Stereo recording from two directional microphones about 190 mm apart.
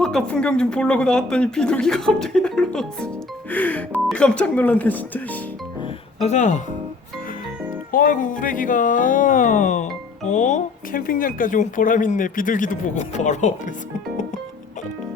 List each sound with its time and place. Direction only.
0.0 s speech: 5° left (ahead or behind)
6.2 s speech: 40° left (ahead or behind)
7.9 s speech: 45° left (ahead or behind)